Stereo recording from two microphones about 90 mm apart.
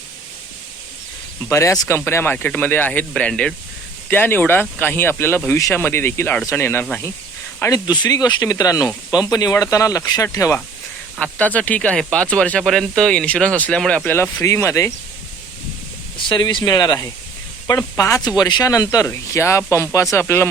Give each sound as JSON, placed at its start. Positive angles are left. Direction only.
{"t": 1.5, "sound": "speech", "side_deg": 35}
{"t": 2.0, "sound": "speech", "side_deg": 25}
{"t": 7.7, "sound": "speech", "side_deg": 45}
{"t": 11.2, "sound": "speech", "side_deg": 15}
{"t": 14.1, "sound": "speech", "side_deg": 25}
{"t": 16.1, "sound": "speech", "side_deg": 60}
{"t": 17.7, "sound": "speech", "side_deg": 35}
{"t": 18.2, "sound": "speech", "side_deg": 50}